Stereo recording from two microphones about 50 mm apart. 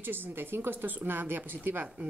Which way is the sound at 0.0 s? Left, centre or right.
Right.